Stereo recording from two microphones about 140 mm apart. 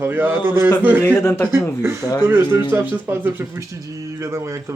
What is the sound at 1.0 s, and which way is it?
Speech, 15° left (ahead or behind).